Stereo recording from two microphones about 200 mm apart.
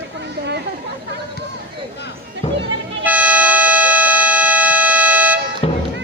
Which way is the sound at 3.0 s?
10° right (ahead or behind).